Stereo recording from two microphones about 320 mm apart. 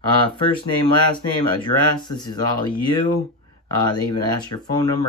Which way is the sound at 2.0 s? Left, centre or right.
Centre.